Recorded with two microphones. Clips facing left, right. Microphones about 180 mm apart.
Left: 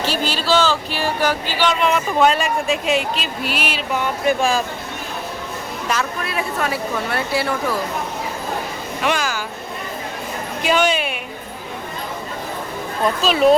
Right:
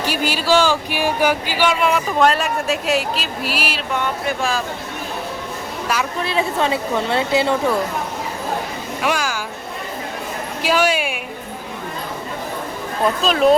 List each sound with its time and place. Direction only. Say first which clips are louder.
0.0 s speech: right 1 dB; 10° right (ahead or behind)
4.3 s speech: left 6 dB; 15° left (ahead or behind)
6.1 s a woman's voice: right 4 dB; 25° right (ahead or behind)
9.0 s speech: even; 5° right (ahead or behind)
10.6 s speech: even; 5° right (ahead or behind)
13.2 s speech: left 1 dB; centre (ahead or behind)